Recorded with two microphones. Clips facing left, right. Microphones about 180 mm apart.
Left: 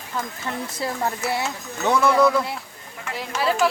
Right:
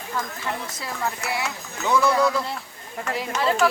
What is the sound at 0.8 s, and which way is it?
Speech, 30° left (ahead or behind).